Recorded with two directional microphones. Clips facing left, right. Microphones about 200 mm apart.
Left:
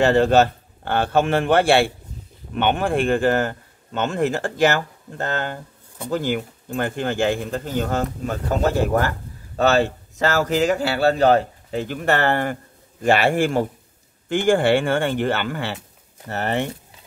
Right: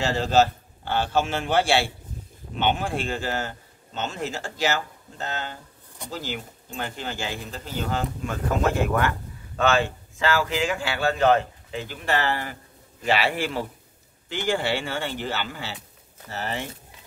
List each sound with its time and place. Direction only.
0.0 s a man's voice: 60° left (ahead or behind)